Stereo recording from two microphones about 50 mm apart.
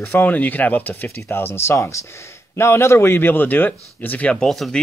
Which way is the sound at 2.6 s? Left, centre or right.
Left.